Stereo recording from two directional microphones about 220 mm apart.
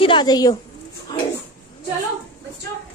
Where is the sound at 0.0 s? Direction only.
20° left (ahead or behind).